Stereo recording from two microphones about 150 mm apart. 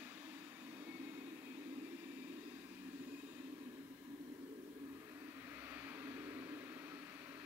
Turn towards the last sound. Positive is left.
turn(degrees=-15)  # may be behind; listen again after turning